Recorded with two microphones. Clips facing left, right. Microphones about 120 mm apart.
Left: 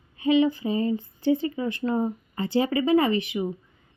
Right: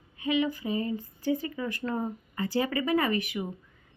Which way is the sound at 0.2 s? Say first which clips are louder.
Left 7 dB; 30° left (ahead or behind).